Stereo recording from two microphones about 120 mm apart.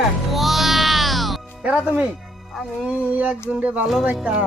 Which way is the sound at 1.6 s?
10° right (ahead or behind).